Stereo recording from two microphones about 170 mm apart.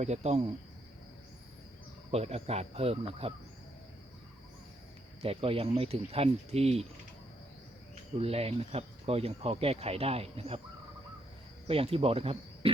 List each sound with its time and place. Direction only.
0.0 s speech: 40° right (ahead or behind)
2.0 s speech: 35° right (ahead or behind)
5.2 s speech: 35° right (ahead or behind)
8.2 s speech: 35° right (ahead or behind)
11.7 s speech: 35° right (ahead or behind)